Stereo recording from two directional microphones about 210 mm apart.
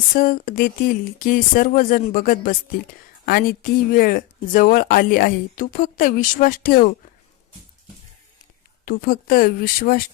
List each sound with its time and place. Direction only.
0.1 s speech: 40° left (ahead or behind)
8.8 s speech: 45° left (ahead or behind)